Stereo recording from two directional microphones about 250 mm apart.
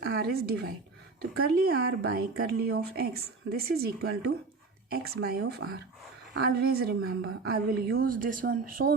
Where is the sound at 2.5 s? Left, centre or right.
Right.